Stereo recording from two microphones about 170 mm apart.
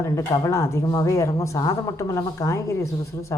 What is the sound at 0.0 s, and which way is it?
Speech, 15° left (ahead or behind).